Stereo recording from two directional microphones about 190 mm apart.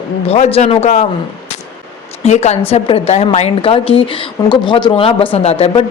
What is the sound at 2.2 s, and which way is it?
A woman's voice, 35° left (ahead or behind).